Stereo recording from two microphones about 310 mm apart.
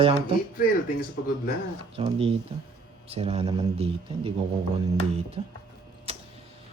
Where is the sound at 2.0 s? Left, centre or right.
Centre.